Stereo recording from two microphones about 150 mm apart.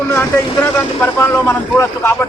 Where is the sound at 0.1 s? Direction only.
15° left (ahead or behind).